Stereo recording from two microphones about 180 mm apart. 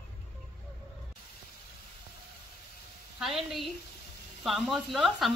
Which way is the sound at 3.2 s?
Centre (ahead or behind).